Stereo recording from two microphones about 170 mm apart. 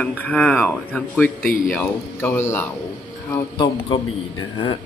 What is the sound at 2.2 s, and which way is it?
Speech, 15° left (ahead or behind).